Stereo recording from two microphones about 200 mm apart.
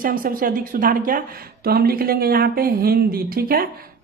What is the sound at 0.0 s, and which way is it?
A woman's voice, 45° right (ahead or behind).